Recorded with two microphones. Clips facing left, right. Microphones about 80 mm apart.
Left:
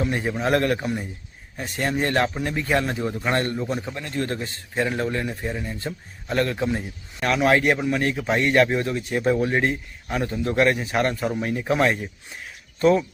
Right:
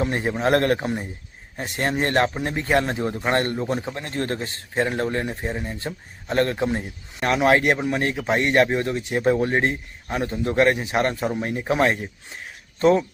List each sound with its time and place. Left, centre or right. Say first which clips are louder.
0.0 s speech: right 2 dB; right
0.8 s speech: right 1 dB; right